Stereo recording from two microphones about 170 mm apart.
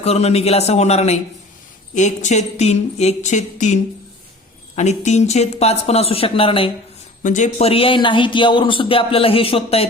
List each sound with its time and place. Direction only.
0.0 s a man's voice: 35° left (ahead or behind)
7.2 s a man's voice: 45° left (ahead or behind)